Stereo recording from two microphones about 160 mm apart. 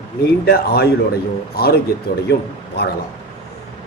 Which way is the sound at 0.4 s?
85° left.